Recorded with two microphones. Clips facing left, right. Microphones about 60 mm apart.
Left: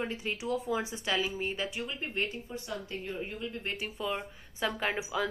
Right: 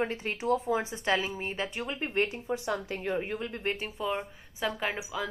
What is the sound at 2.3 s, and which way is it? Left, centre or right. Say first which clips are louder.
Speech: right 7 dB; right.